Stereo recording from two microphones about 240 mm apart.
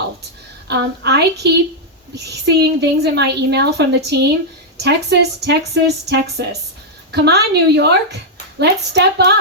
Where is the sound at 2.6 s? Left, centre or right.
Right.